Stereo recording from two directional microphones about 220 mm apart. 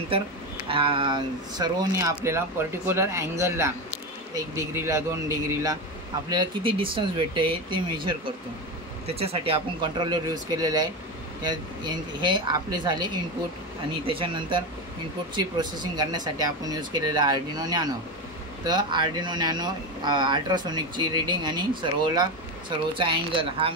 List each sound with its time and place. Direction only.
0.7 s speech: 25° right (ahead or behind)